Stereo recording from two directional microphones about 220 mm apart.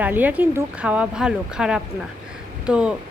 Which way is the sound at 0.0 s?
5° right (ahead or behind).